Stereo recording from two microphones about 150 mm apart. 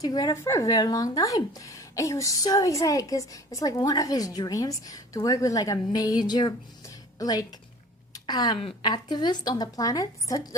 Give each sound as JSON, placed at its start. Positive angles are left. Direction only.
{"t": 0.0, "sound": "speech", "side_deg": 25}
{"t": 8.1, "sound": "a sound", "side_deg": 25}
{"t": 8.6, "sound": "speech", "side_deg": 30}